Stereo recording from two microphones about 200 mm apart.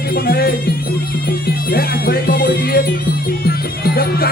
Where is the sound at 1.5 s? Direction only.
50° left (ahead or behind).